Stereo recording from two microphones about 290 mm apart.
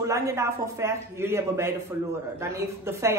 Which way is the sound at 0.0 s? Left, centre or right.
Centre.